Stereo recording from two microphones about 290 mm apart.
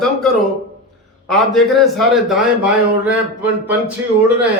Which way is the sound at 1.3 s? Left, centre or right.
Centre.